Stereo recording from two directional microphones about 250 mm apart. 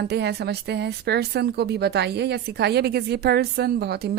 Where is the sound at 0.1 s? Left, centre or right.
Right.